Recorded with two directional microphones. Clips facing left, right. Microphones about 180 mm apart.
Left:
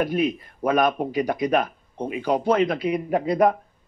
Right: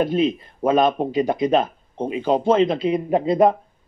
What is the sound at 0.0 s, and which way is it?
Speech, 25° right (ahead or behind).